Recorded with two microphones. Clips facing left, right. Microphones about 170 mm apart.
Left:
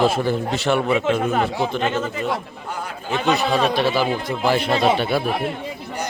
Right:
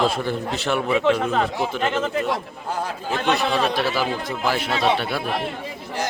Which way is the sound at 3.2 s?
Centre (ahead or behind).